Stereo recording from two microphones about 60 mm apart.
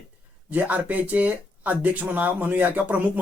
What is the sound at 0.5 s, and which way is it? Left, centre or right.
Speech, right.